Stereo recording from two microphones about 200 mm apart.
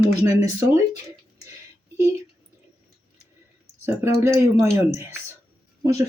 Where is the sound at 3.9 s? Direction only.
15° right (ahead or behind).